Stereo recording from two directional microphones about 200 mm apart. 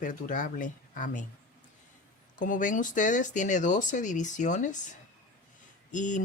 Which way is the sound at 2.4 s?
40° left (ahead or behind).